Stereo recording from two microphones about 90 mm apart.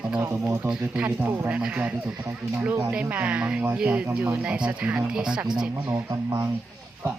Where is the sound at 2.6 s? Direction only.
25° right (ahead or behind).